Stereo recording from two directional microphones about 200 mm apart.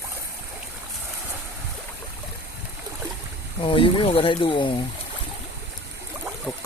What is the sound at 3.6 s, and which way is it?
Speech, 25° left (ahead or behind).